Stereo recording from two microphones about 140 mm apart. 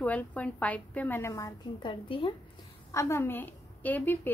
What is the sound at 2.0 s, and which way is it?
Speech, 40° left (ahead or behind).